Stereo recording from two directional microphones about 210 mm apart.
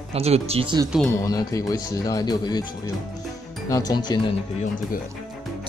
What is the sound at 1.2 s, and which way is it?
Speech, 15° left (ahead or behind).